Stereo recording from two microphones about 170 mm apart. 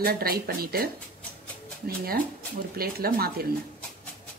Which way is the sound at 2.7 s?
65° right (ahead or behind).